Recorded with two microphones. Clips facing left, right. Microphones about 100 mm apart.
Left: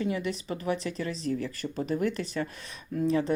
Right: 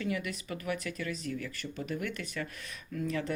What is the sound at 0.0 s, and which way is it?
Speech, 25° left (ahead or behind).